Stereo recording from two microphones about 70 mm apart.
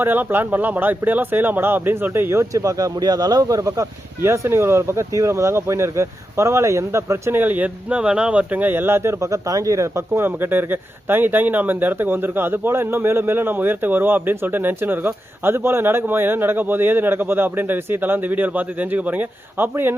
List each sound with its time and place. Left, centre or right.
0.0 s speech: right
3.6 s speech: right
4.2 s speech: right
7.3 s speech: right
9.2 s speech: right
10.2 s speech: right